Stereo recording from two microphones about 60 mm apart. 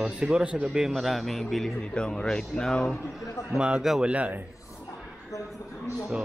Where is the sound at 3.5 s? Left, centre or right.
Centre.